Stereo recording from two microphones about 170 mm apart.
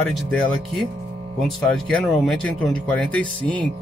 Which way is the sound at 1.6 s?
5° left (ahead or behind).